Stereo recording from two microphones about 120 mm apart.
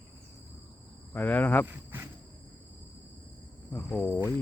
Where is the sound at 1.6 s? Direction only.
15° right (ahead or behind).